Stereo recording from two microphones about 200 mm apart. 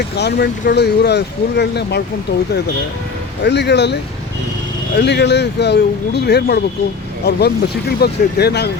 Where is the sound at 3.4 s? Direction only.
55° left (ahead or behind).